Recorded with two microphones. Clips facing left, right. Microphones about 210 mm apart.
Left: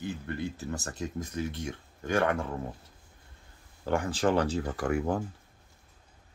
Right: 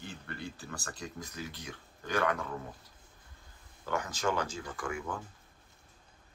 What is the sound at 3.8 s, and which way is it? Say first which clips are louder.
Speech: left 6 dB; 30° left (ahead or behind).